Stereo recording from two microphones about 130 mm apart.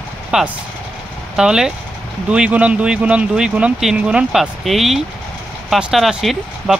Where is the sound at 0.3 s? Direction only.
5° right (ahead or behind).